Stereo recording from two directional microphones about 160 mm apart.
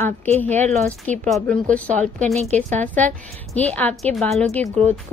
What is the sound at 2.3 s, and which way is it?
Speech, 45° right (ahead or behind).